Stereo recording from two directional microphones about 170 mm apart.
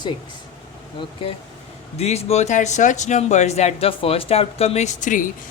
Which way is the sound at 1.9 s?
40° left (ahead or behind).